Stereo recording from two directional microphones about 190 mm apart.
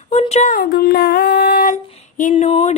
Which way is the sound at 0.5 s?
50° left (ahead or behind).